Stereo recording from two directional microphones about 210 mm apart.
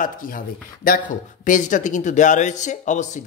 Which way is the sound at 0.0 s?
40° left (ahead or behind).